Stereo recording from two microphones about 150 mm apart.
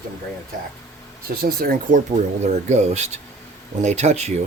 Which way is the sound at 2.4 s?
50° right (ahead or behind).